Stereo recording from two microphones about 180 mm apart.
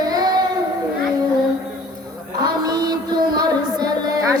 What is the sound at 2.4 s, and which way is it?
Music, 20° right (ahead or behind).